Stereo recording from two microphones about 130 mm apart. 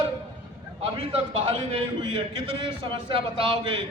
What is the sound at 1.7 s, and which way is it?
A man's voice, 45° right (ahead or behind).